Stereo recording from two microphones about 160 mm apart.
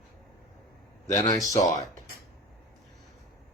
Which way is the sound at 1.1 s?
25° left (ahead or behind).